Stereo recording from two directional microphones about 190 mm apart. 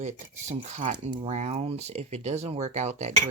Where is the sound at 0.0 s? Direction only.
35° right (ahead or behind).